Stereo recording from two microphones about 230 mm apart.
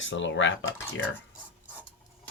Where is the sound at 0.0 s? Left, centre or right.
Left.